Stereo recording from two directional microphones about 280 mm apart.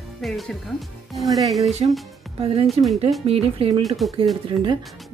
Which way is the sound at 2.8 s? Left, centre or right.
Centre.